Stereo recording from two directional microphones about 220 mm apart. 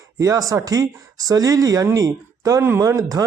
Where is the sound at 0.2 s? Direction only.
15° right (ahead or behind).